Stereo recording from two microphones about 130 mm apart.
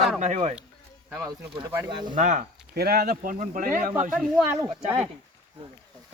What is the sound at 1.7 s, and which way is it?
Speech, 20° right (ahead or behind).